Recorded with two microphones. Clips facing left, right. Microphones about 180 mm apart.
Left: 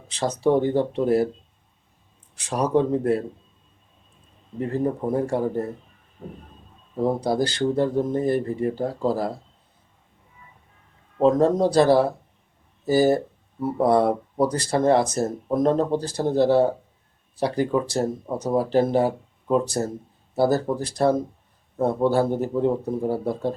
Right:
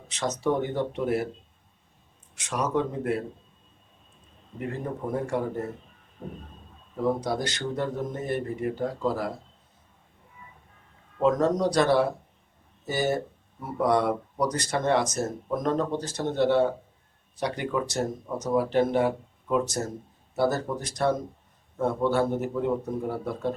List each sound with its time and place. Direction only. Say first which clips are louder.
0.1 s speech: left 6 dB; 30° left (ahead or behind)
2.3 s speech: left 6 dB; 35° left (ahead or behind)
4.8 s speech: left 8 dB; 35° left (ahead or behind)
6.9 s speech: left 4 dB; 30° left (ahead or behind)
11.2 s speech: left 5 dB; 30° left (ahead or behind)